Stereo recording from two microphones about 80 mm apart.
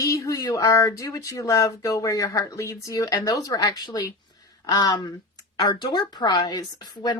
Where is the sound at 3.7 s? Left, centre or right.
Left.